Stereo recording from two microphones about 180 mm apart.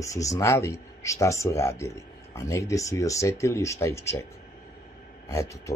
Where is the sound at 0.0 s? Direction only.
15° left (ahead or behind).